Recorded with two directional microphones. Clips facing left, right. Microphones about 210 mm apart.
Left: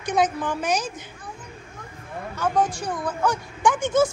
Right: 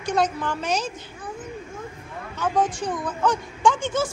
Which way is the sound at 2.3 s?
10° left (ahead or behind).